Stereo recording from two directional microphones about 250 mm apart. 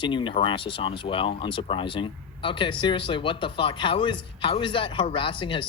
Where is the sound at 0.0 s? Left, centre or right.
Centre.